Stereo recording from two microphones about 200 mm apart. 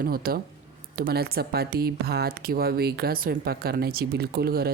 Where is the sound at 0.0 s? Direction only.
50° right (ahead or behind).